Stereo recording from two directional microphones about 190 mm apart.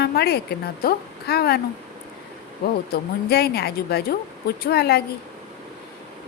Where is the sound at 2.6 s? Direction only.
55° left (ahead or behind).